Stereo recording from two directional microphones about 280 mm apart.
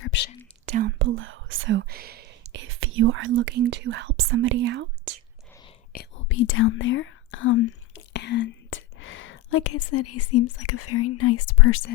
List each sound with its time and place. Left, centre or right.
0.0 s whispering: left
0.7 s whispering: right
2.4 s speech: right
5.9 s speech: left